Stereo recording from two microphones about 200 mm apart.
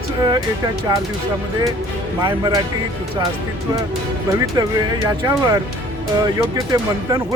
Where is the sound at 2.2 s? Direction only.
20° right (ahead or behind).